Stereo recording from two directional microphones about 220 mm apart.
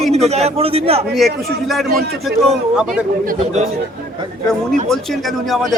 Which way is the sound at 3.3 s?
30° right (ahead or behind).